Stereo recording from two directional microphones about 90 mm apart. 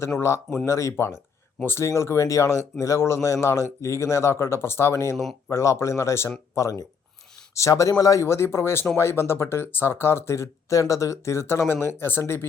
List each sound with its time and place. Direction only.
0.6 s speech: 35° left (ahead or behind)